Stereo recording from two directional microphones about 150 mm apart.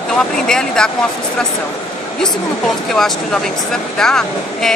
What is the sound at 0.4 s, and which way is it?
Speech, 5° left (ahead or behind).